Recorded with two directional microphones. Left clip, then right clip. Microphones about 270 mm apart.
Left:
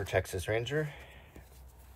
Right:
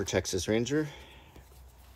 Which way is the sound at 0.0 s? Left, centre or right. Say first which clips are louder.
Right 2 dB; centre.